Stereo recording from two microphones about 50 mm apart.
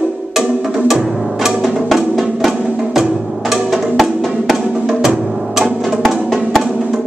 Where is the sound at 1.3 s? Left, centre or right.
Centre.